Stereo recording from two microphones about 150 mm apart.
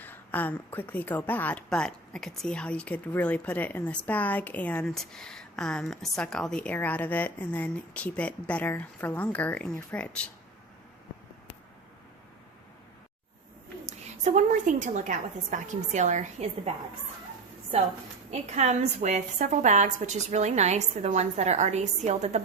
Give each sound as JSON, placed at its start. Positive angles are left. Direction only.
{"t": 0.0, "sound": "a woman's voice", "side_deg": 10}
{"t": 13.8, "sound": "a woman's voice", "side_deg": -50}
{"t": 18.3, "sound": "a woman's voice", "side_deg": -50}